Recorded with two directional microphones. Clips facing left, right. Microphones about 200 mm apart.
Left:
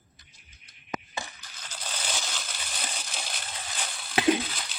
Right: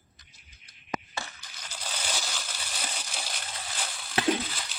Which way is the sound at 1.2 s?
15° left (ahead or behind).